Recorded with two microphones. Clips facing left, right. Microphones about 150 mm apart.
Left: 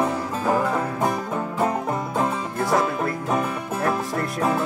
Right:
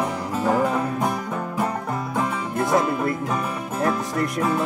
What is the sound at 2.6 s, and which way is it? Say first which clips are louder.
Music: right 1 dB; 20° right (ahead or behind).